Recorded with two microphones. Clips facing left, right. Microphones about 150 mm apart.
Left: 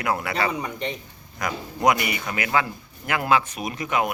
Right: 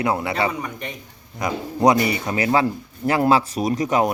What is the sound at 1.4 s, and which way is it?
Speech, 30° right (ahead or behind).